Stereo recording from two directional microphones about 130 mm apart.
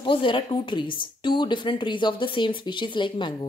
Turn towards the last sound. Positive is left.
turn(degrees=40)  # may be behind; listen again after turning